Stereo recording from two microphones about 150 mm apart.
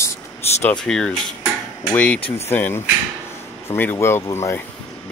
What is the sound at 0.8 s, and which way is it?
Speech, 5° left (ahead or behind).